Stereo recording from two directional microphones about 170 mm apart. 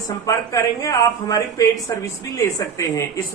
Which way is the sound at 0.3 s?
20° left (ahead or behind).